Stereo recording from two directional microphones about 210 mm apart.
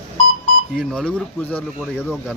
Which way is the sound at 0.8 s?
Centre (ahead or behind).